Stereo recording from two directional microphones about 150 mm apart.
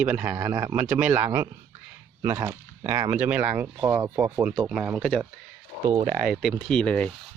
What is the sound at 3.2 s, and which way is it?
Speech, 10° right (ahead or behind).